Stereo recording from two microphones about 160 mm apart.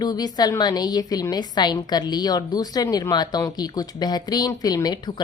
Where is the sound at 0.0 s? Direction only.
25° left (ahead or behind).